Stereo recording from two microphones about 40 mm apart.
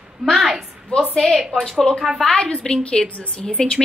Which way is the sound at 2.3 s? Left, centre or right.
Left.